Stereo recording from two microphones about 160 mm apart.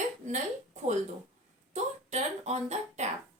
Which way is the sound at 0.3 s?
50° right (ahead or behind).